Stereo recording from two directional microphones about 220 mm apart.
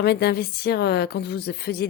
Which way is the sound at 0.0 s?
45° left (ahead or behind).